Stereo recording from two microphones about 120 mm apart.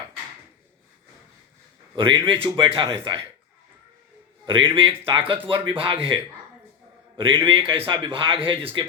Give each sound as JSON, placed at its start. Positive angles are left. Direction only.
{"t": 2.0, "sound": "a man's voice", "side_deg": -45}
{"t": 4.4, "sound": "a man's voice", "side_deg": -45}
{"t": 7.2, "sound": "a man's voice", "side_deg": -45}